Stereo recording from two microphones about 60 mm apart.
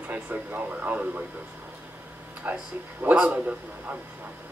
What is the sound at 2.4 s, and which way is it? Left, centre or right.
A man's voice, right.